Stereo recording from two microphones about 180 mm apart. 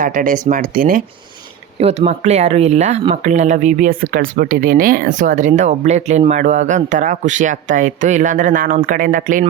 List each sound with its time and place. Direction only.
0.0 s speech: 45° right (ahead or behind)
1.8 s speech: 40° right (ahead or behind)